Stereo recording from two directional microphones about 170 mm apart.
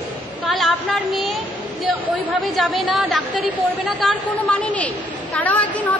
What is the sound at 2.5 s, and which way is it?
A woman's voice, centre (ahead or behind).